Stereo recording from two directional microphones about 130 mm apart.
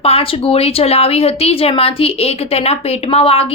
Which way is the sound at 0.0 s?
50° left (ahead or behind).